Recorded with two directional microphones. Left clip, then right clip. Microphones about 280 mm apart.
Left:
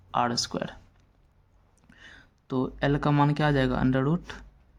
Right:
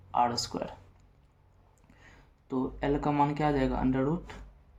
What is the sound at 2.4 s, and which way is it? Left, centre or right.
Speech, left.